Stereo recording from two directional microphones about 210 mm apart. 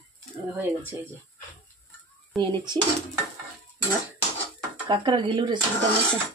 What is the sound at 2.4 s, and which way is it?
Speech, 15° right (ahead or behind).